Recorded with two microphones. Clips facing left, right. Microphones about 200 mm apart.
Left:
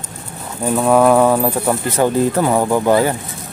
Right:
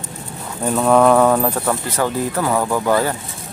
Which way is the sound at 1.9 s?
20° left (ahead or behind).